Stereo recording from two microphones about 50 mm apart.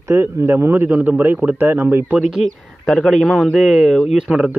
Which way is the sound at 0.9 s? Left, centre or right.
Right.